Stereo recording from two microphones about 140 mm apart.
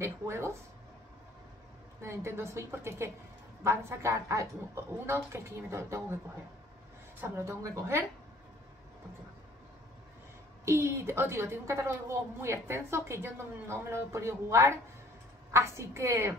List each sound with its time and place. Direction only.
0.0 s a woman's voice: 20° right (ahead or behind)
2.0 s a woman's voice: 20° right (ahead or behind)
7.2 s a woman's voice: 20° right (ahead or behind)
10.6 s a woman's voice: 20° right (ahead or behind)